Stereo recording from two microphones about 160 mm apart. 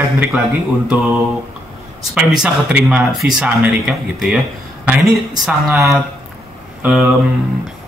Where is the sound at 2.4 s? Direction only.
5° right (ahead or behind).